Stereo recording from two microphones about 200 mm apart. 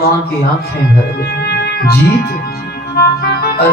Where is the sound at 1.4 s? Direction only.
55° left (ahead or behind).